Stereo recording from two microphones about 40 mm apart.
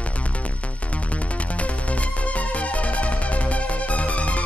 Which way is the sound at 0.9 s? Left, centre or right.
Left.